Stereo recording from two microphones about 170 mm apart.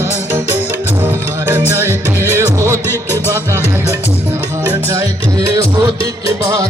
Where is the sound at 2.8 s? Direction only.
15° left (ahead or behind).